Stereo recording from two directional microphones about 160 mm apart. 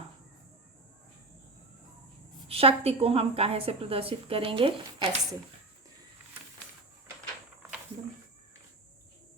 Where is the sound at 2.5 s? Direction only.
40° right (ahead or behind).